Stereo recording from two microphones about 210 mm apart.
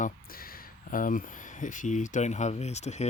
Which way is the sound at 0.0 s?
45° left (ahead or behind).